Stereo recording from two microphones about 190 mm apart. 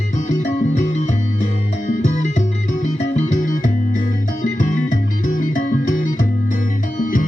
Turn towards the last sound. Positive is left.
turn(degrees=45)  # may be behind; listen again after turning